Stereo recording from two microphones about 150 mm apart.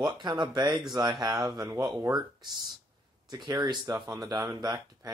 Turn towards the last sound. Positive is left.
turn(degrees=-25)  # may be behind; listen again after turning